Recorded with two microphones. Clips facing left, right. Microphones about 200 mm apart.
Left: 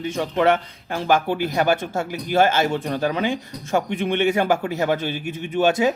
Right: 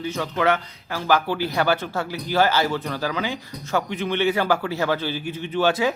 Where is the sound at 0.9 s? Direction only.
20° left (ahead or behind).